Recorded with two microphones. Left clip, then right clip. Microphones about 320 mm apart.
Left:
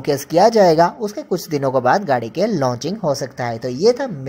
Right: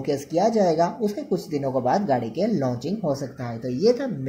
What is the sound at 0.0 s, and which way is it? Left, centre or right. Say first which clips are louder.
Speech: left 8 dB; left.